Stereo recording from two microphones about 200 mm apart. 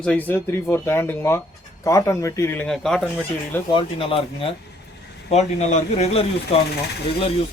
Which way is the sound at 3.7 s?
25° left (ahead or behind).